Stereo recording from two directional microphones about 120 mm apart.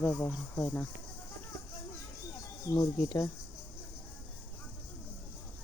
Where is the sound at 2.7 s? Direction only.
30° left (ahead or behind).